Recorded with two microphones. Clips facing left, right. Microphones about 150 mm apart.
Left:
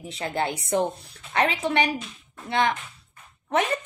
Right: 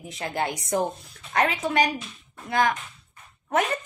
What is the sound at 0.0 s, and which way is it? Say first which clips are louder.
A woman's voice: left 1 dB; 30° left (ahead or behind).